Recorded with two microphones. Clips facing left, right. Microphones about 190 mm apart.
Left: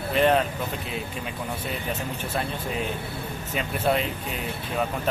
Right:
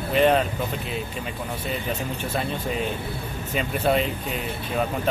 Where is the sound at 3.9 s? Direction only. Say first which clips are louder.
Right 2 dB; centre (ahead or behind).